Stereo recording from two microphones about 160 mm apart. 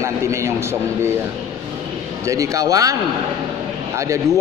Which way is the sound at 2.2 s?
20° right (ahead or behind).